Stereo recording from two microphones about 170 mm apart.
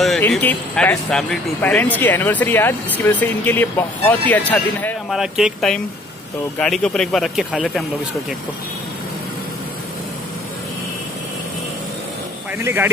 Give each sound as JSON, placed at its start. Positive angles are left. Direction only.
{"t": 0.3, "sound": "speech", "side_deg": 10}
{"t": 5.1, "sound": "speech", "side_deg": -5}
{"t": 12.6, "sound": "speech", "side_deg": -10}